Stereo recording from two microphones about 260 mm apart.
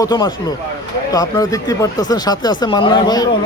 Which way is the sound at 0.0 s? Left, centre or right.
Centre.